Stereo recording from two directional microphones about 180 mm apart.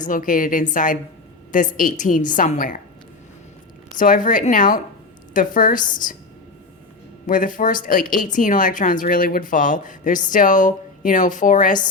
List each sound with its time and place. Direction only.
0.0 s speech: 50° left (ahead or behind)
3.9 s speech: 50° left (ahead or behind)
7.3 s speech: 50° left (ahead or behind)